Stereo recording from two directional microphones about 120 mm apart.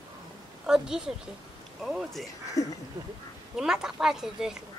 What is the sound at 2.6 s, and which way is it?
Speech, 25° left (ahead or behind).